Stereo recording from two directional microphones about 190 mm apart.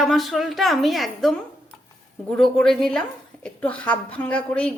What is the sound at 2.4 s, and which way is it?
A woman's voice, 5° left (ahead or behind).